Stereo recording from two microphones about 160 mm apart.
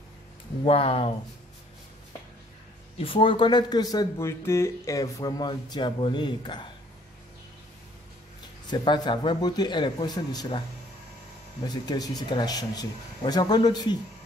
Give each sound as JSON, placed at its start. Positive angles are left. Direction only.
{"t": 0.7, "sound": "speech", "side_deg": 35}
{"t": 3.0, "sound": "speech", "side_deg": 35}
{"t": 8.6, "sound": "speech", "side_deg": 30}
{"t": 11.6, "sound": "speech", "side_deg": 25}